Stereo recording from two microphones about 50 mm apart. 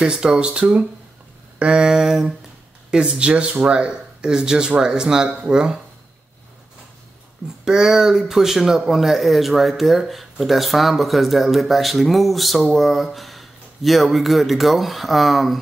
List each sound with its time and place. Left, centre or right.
0.0 s speech: centre
7.6 s speech: centre